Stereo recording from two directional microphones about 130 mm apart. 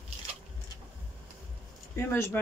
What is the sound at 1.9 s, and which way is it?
Speech, 20° left (ahead or behind).